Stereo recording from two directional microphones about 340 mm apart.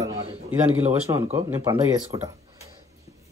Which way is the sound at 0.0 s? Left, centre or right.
Centre.